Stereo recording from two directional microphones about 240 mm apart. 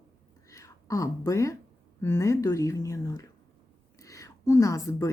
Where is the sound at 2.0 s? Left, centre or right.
Centre.